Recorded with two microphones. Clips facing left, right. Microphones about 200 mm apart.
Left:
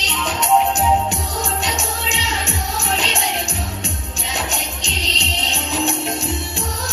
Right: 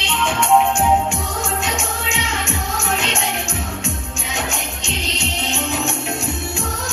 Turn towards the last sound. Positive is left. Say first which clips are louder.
# even
turn(degrees=35)  # may be behind; listen again after turning